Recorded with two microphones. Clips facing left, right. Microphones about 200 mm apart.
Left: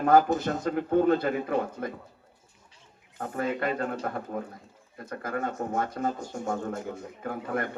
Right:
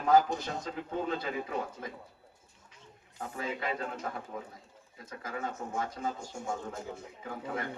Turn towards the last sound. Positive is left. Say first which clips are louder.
# left 6 dB
turn(degrees=60)  # may be behind; listen again after turning